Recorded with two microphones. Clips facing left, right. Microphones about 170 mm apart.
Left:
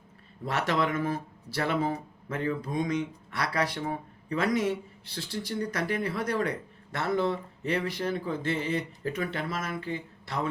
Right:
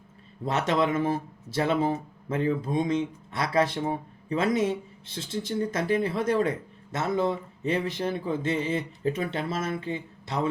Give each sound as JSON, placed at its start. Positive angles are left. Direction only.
{"t": 0.4, "sound": "speech", "side_deg": -20}